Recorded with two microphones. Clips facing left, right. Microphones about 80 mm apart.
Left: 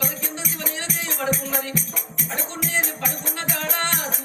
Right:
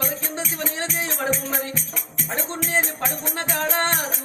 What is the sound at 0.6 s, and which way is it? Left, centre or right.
Music, right.